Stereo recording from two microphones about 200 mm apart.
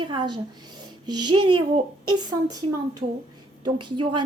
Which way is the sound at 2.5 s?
20° right (ahead or behind).